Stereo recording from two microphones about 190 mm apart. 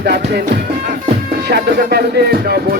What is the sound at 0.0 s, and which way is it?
Speech, 60° right (ahead or behind).